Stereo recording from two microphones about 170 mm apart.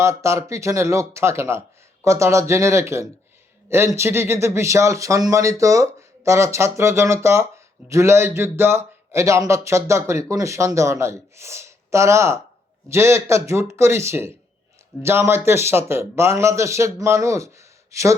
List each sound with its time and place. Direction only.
0.0 s speech: 15° right (ahead or behind)